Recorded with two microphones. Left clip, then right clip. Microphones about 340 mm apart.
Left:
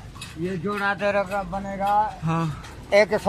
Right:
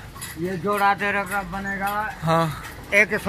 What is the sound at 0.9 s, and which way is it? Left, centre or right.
Speech, centre.